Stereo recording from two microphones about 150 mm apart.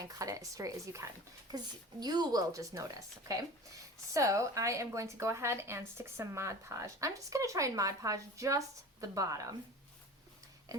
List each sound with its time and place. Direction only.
0.0 s a woman's voice: 20° right (ahead or behind)